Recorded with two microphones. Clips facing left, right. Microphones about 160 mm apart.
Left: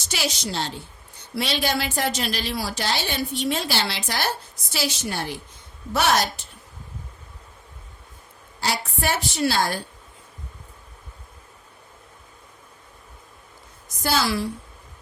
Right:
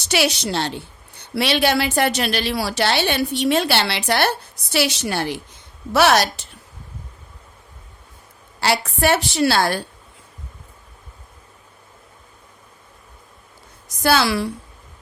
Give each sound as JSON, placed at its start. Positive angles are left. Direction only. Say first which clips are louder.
{"t": 0.0, "sound": "a woman's voice", "louder": "right 8 dB", "side_deg": -70}
{"t": 8.6, "sound": "a woman's voice", "louder": "right 7 dB", "side_deg": -70}
{"t": 14.0, "sound": "a woman's voice", "louder": "right 5 dB", "side_deg": -70}